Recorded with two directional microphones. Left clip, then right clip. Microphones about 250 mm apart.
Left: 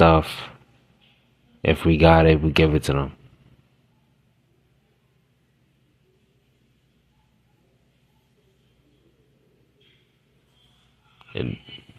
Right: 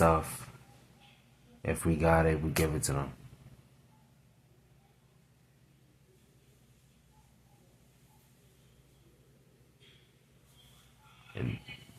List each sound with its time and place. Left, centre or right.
0.0 s speech: left
1.6 s speech: left